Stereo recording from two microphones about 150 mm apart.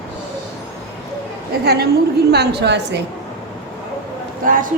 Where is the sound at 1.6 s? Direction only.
90° right.